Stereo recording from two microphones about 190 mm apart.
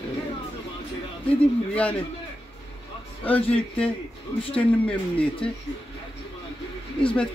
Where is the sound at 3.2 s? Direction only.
5° left (ahead or behind).